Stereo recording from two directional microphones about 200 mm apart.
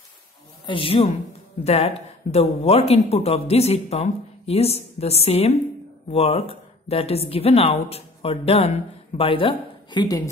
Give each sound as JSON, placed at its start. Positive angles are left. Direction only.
{"t": 0.7, "sound": "a woman's voice", "side_deg": 25}